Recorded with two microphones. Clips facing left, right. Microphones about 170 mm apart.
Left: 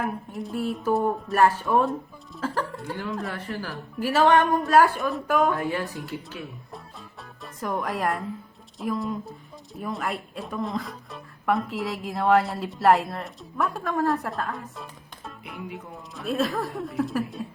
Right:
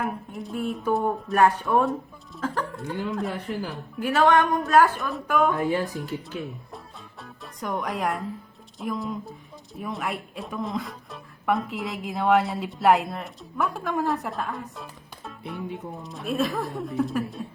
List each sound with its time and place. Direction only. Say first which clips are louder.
0.0 s speech: left 1 dB; centre (ahead or behind)
2.8 s speech: right 2 dB; 20° right (ahead or behind)
3.9 s speech: even; centre (ahead or behind)
5.5 s speech: right 3 dB; 20° right (ahead or behind)
7.2 s music: left 1 dB; centre (ahead or behind)
8.8 s speech: left 2 dB; centre (ahead or behind)